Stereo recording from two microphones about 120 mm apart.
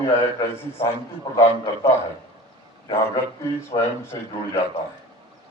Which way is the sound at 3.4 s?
20° left (ahead or behind).